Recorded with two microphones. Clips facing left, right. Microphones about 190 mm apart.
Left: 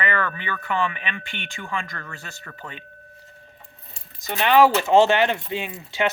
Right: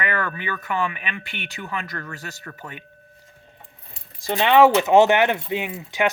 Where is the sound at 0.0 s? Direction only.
10° right (ahead or behind).